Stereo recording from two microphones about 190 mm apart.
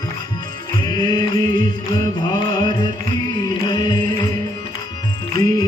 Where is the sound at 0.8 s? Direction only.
25° left (ahead or behind).